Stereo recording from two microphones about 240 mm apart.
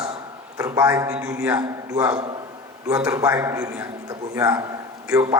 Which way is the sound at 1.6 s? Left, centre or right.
Centre.